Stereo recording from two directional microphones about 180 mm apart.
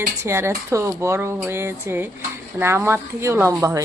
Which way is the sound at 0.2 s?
15° right (ahead or behind).